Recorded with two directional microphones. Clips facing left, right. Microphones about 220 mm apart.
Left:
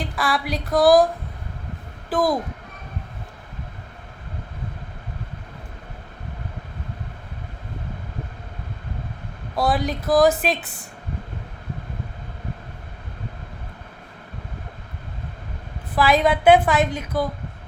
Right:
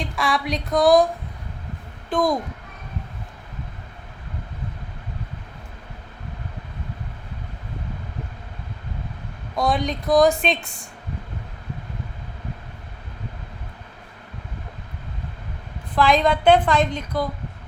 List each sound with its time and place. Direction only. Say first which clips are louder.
0.0 s speech: even; centre (ahead or behind)
2.0 s speech: even; 5° left (ahead or behind)
9.6 s speech: even; 5° left (ahead or behind)
16.0 s a woman's voice: even; 5° left (ahead or behind)